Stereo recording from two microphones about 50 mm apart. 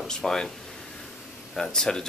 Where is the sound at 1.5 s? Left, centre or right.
Centre.